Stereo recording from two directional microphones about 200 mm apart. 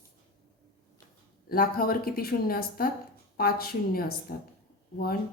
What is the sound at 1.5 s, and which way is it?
A woman's voice, 45° left (ahead or behind).